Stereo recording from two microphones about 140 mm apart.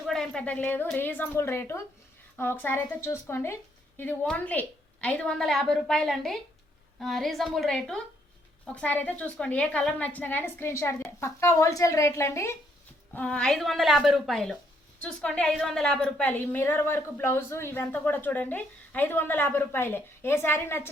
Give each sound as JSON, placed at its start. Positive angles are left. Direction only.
{"t": 0.0, "sound": "a woman's voice", "side_deg": 5}
{"t": 13.1, "sound": "a woman's voice", "side_deg": 10}